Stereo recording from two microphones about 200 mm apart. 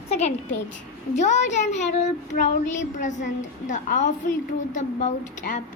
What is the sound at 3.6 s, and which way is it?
Child singing, 40° left (ahead or behind).